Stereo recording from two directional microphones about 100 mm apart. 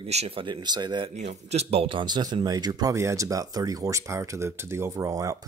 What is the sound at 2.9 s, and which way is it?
Speech, 30° right (ahead or behind).